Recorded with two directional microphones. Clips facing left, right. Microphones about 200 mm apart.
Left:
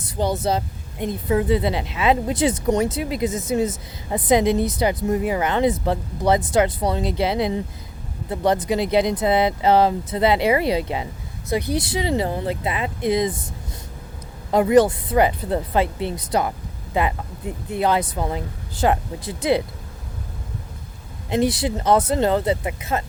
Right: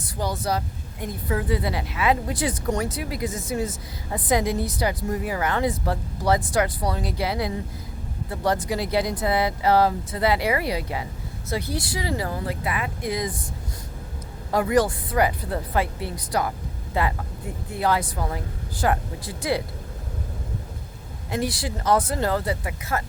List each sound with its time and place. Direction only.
0.0 s a woman's voice: 25° left (ahead or behind)
14.5 s a woman's voice: 20° left (ahead or behind)
21.2 s a woman's voice: 20° left (ahead or behind)